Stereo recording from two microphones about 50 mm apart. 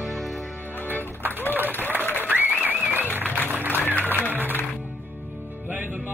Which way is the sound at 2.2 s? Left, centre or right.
Right.